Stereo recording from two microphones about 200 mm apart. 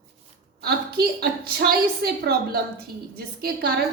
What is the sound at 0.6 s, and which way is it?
A woman's voice, 50° right (ahead or behind).